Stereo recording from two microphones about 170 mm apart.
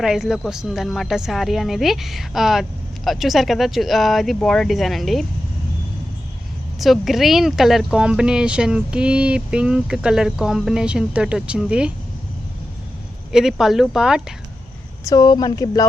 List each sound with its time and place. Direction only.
0.0 s speech: centre (ahead or behind)
6.7 s speech: centre (ahead or behind)
13.3 s speech: 5° right (ahead or behind)
15.0 s speech: 25° left (ahead or behind)